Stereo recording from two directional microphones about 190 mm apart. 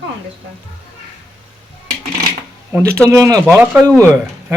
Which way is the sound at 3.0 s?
15° right (ahead or behind).